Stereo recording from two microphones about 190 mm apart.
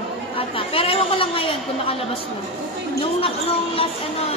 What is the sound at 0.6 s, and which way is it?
Chatter, 30° left (ahead or behind).